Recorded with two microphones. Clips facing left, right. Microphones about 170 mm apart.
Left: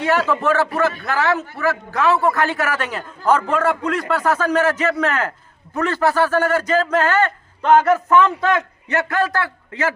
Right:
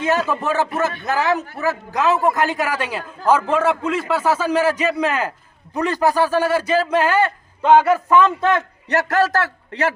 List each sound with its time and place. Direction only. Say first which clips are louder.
0.0 s a man's voice: left 2 dB; 20° right (ahead or behind)
8.9 s a man's voice: right 3 dB; 40° right (ahead or behind)